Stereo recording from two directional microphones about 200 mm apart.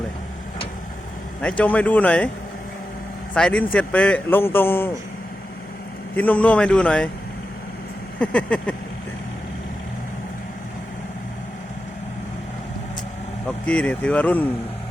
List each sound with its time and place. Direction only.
1.4 s a man's voice: 5° left (ahead or behind)
3.3 s a man's voice: 5° left (ahead or behind)
6.1 s a man's voice: 5° left (ahead or behind)
8.2 s a man's voice: 5° left (ahead or behind)
13.7 s a man's voice: 5° left (ahead or behind)